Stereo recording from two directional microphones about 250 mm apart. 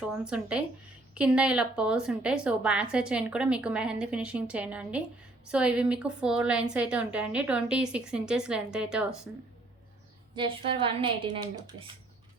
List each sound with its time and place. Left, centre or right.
0.0 s a woman's voice: centre
10.3 s a woman's voice: right